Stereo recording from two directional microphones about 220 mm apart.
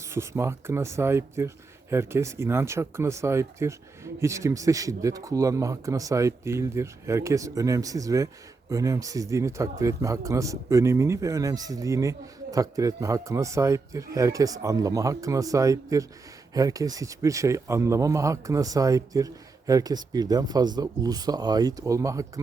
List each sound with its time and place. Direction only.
0.1 s speech: 10° right (ahead or behind)